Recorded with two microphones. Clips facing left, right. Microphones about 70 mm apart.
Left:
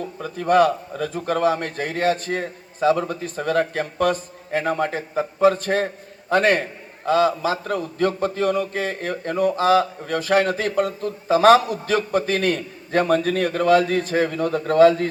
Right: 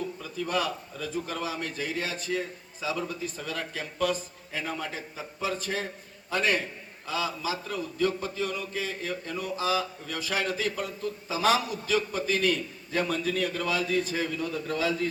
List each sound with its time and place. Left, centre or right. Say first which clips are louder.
0.0 s a man's voice: left 6 dB; left